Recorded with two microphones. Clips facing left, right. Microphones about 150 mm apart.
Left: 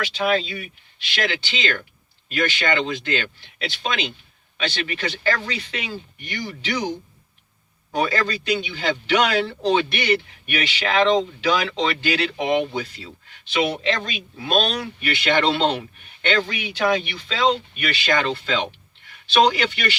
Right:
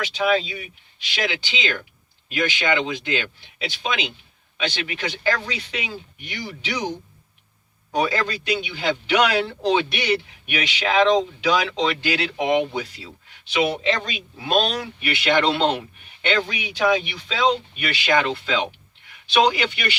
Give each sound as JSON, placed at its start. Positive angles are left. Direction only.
{"t": 1.1, "sound": "a man's voice", "side_deg": -10}
{"t": 7.9, "sound": "a man's voice", "side_deg": -10}